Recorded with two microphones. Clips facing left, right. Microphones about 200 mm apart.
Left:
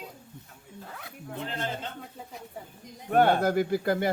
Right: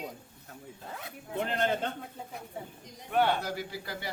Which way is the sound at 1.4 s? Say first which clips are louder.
Right 5 dB; 60° right (ahead or behind).